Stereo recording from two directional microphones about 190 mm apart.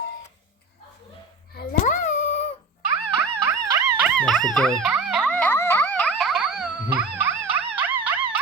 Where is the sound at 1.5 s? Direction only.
40° left (ahead or behind).